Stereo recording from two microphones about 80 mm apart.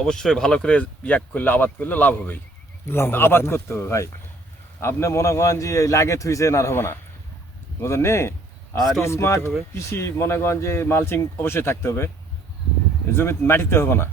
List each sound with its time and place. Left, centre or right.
0.0 s speech: centre; by 14.1 s left